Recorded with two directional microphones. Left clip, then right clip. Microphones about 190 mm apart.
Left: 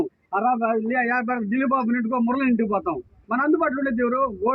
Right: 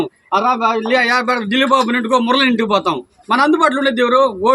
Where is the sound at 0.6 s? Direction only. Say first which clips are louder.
Right 8 dB; 10° right (ahead or behind).